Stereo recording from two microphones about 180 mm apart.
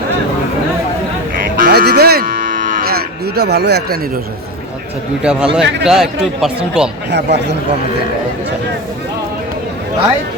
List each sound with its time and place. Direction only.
1.5 s sheep: 55° right (ahead or behind)
2.8 s speech: 60° right (ahead or behind)
5.2 s speech: 5° right (ahead or behind)
7.1 s speech: 75° right (ahead or behind)